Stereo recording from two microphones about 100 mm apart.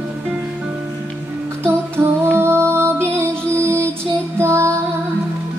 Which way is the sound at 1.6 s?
25° right (ahead or behind).